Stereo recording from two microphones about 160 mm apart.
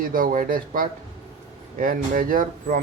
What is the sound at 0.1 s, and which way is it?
Speech, 60° right (ahead or behind).